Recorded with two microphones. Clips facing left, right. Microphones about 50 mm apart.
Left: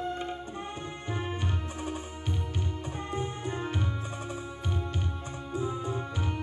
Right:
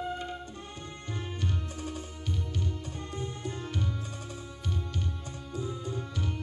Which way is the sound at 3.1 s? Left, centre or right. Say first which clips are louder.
Left 4 dB; left.